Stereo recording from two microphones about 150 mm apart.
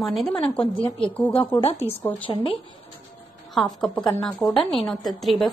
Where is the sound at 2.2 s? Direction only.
35° left (ahead or behind).